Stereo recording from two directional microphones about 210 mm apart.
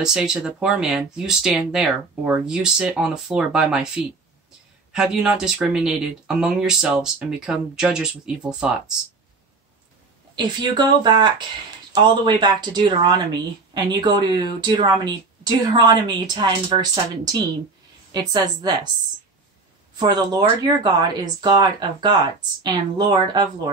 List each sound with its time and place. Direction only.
0.0 s speech: 5° right (ahead or behind)
4.9 s speech: 5° right (ahead or behind)
10.3 s speech: 20° right (ahead or behind)
20.0 s speech: 20° right (ahead or behind)